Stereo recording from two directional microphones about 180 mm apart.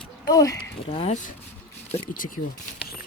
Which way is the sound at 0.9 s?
35° left (ahead or behind).